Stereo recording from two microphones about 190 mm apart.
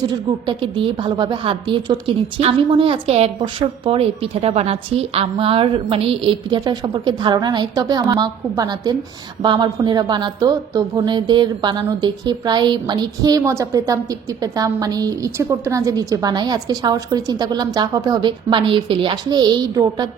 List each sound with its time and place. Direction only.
0.4 s a woman's voice: 25° right (ahead or behind)